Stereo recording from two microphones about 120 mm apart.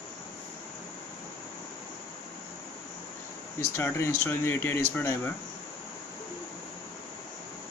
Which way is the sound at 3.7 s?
20° left (ahead or behind).